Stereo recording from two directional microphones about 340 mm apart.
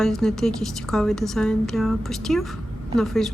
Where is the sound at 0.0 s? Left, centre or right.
Centre.